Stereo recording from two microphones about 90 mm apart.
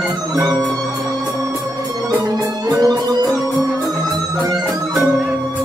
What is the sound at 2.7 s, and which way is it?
Music, 45° right (ahead or behind).